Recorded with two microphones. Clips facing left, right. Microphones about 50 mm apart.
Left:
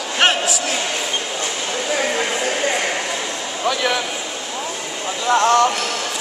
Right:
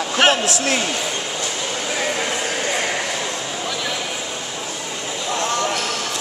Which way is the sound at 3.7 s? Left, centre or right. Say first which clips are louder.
Left 8 dB; left.